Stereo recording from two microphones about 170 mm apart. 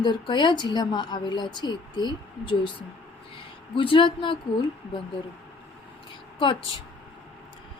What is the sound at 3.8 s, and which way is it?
Speech, 30° left (ahead or behind).